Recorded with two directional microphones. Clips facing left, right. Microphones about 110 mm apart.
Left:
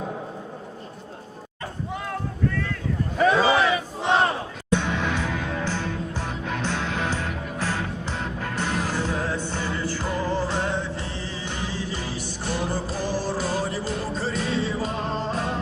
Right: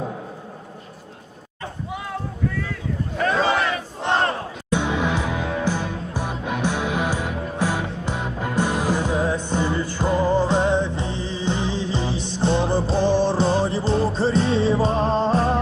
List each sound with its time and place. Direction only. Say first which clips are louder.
3.2 s battle cry: left 2 dB; 5° left (ahead or behind)
4.7 s music: right 3 dB; 15° right (ahead or behind); by 15.5 s 35° right (ahead or behind)